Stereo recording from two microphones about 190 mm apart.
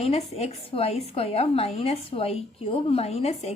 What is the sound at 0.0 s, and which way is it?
A woman's voice, 35° left (ahead or behind).